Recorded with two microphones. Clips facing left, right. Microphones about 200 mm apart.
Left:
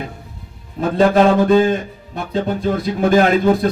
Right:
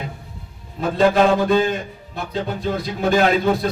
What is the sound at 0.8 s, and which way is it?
Speech, 45° left (ahead or behind).